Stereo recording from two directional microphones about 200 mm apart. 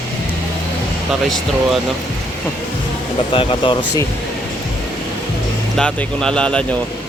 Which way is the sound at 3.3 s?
25° left (ahead or behind).